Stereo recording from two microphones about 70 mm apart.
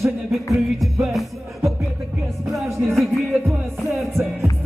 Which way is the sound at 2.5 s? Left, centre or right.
Centre.